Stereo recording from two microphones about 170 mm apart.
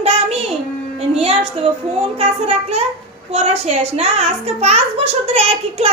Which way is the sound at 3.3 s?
40° right (ahead or behind).